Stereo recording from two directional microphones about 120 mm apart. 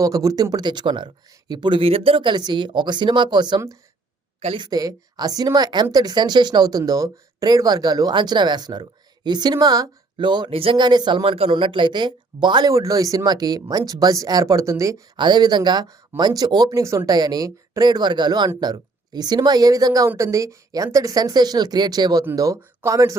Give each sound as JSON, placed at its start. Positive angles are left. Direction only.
{"t": 0.0, "sound": "a woman's voice", "side_deg": -30}
{"t": 4.4, "sound": "speech", "side_deg": -55}
{"t": 4.6, "sound": "a woman's voice", "side_deg": -30}
{"t": 11.2, "sound": "a woman's voice", "side_deg": -50}
{"t": 15.2, "sound": "a woman's voice", "side_deg": -40}